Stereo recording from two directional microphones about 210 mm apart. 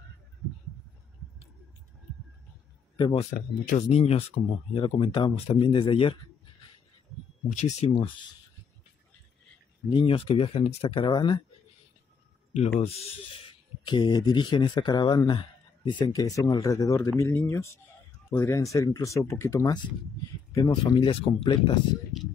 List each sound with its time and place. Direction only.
3.0 s speech: 25° left (ahead or behind)
3.3 s speech: 35° left (ahead or behind)
7.5 s speech: 35° left (ahead or behind)
7.9 s speech: 20° left (ahead or behind)
9.9 s speech: 25° left (ahead or behind)
12.8 s speech: 30° left (ahead or behind)